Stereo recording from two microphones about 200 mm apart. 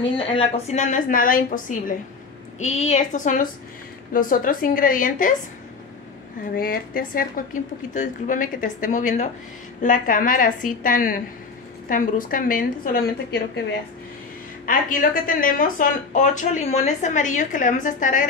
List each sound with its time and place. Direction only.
0.2 s speech: 25° left (ahead or behind)
0.7 s a woman's voice: 40° left (ahead or behind)
6.5 s a woman's voice: 45° left (ahead or behind)
14.7 s a woman's voice: 45° left (ahead or behind)